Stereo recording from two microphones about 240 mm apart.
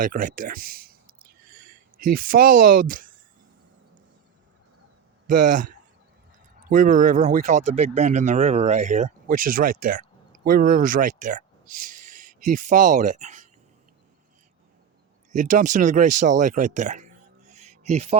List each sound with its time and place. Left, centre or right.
0.0 s speech: right
5.2 s speech: right
15.3 s speech: right